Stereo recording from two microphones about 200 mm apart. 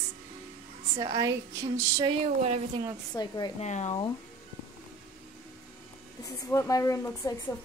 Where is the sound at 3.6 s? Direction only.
35° left (ahead or behind).